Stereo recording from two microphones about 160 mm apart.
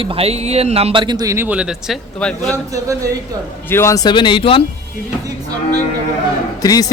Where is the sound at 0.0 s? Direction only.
35° right (ahead or behind); by 2.0 s 5° right (ahead or behind).